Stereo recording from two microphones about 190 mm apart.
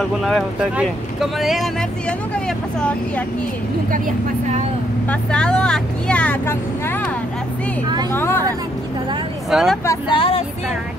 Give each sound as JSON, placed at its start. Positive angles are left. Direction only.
{"t": 0.2, "sound": "speech", "side_deg": -5}
{"t": 5.0, "sound": "speech", "side_deg": 5}
{"t": 8.1, "sound": "speech", "side_deg": 10}
{"t": 9.5, "sound": "speech", "side_deg": 0}
{"t": 10.1, "sound": "speech", "side_deg": 30}